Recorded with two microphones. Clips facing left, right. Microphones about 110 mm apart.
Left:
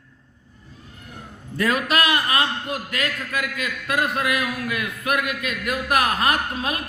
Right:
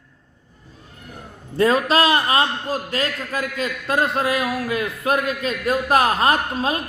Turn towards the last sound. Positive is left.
turn(degrees=-30)  # may be behind; listen again after turning